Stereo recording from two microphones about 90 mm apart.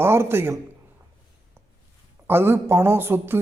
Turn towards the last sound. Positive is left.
turn(degrees=-25)  # may be behind; listen again after turning